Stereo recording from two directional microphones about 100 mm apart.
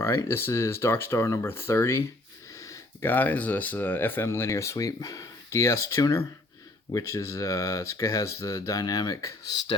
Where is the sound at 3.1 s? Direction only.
15° left (ahead or behind); by 9.3 s 35° left (ahead or behind).